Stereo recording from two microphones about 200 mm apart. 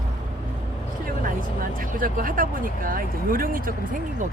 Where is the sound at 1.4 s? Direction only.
45° right (ahead or behind).